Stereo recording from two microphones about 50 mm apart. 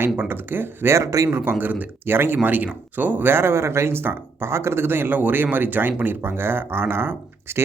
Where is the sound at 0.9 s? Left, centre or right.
Right.